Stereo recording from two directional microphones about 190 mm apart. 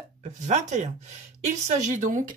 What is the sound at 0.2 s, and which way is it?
Speech, 35° right (ahead or behind).